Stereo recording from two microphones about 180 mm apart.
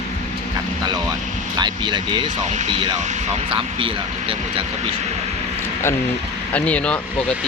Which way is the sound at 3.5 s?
30° right (ahead or behind).